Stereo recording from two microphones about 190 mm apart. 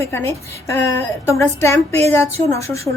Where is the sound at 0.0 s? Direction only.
15° left (ahead or behind).